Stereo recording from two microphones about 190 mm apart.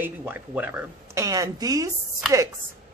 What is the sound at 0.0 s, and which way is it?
Speech, 10° right (ahead or behind).